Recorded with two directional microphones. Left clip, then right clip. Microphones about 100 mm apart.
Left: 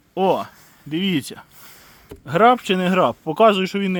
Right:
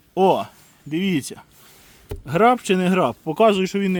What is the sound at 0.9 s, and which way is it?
Speech, 20° right (ahead or behind).